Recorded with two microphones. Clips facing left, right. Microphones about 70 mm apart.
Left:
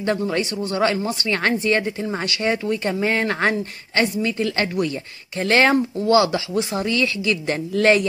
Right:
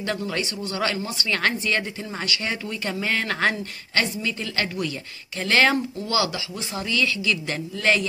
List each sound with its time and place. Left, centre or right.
0.0 s speech: left
6.7 s speech: left